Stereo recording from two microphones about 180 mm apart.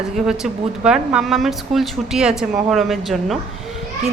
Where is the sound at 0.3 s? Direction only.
5° right (ahead or behind).